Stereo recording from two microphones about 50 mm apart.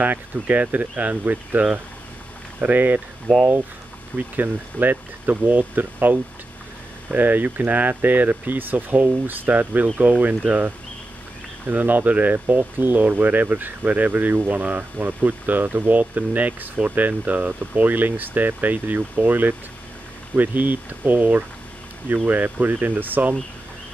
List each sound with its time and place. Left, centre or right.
0.0 s speech: right
4.2 s speech: right